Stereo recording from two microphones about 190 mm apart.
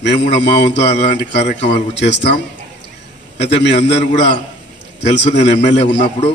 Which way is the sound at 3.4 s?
65° left (ahead or behind).